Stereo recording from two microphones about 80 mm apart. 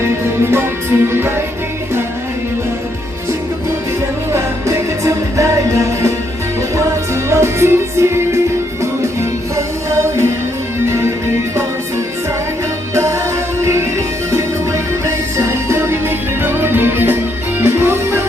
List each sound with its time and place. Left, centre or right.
0.5 s music: right
4.3 s music: right
9.6 s music: right
13.6 s music: right